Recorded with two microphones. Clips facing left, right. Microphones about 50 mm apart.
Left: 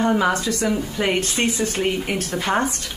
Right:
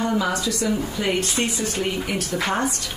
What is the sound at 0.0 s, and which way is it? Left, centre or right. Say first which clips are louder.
A woman's voice: left 3 dB; left.